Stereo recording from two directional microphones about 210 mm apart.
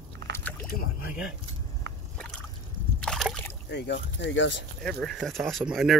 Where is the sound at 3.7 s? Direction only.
55° left (ahead or behind).